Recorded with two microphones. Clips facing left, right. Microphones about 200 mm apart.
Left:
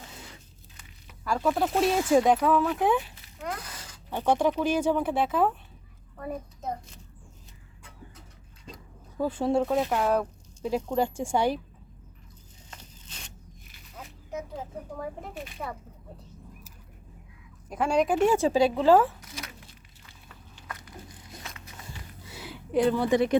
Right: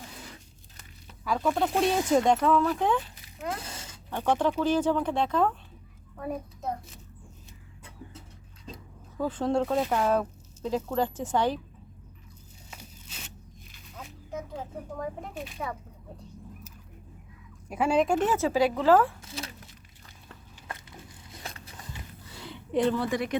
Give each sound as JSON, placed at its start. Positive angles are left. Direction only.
{"t": 1.2, "sound": "speech", "side_deg": 0}
{"t": 3.5, "sound": "speech", "side_deg": -25}
{"t": 4.1, "sound": "speech", "side_deg": 10}
{"t": 9.1, "sound": "speech", "side_deg": 10}
{"t": 10.6, "sound": "speech", "side_deg": 10}
{"t": 12.7, "sound": "a sound", "side_deg": -5}
{"t": 14.5, "sound": "speech", "side_deg": 5}
{"t": 17.7, "sound": "speech", "side_deg": -5}
{"t": 18.4, "sound": "speech", "side_deg": 30}
{"t": 18.7, "sound": "speech", "side_deg": 15}
{"t": 19.2, "sound": "speech", "side_deg": -30}
{"t": 20.2, "sound": "a sound", "side_deg": -25}
{"t": 22.3, "sound": "a sound", "side_deg": 5}
{"t": 23.0, "sound": "speech", "side_deg": 20}